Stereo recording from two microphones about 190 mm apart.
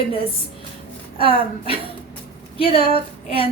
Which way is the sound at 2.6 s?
30° left (ahead or behind).